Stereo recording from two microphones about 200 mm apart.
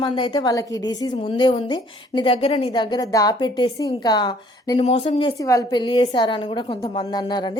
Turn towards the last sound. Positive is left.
turn(degrees=20)  # may be behind; listen again after turning